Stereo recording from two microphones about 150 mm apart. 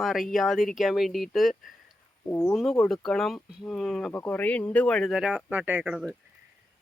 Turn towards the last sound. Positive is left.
turn(degrees=-5)  # may be behind; listen again after turning